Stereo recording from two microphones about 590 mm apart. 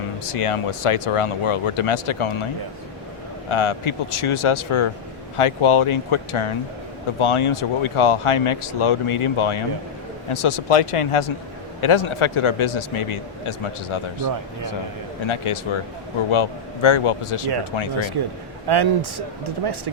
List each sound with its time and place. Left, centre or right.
0.3 s speech: left
3.5 s a man's voice: left
15.3 s a man's voice: left
18.7 s a man's voice: right